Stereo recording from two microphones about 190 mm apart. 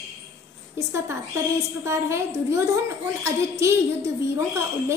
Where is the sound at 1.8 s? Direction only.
15° right (ahead or behind).